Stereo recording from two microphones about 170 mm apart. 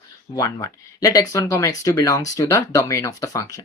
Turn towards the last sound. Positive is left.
turn(degrees=20)  # may be behind; listen again after turning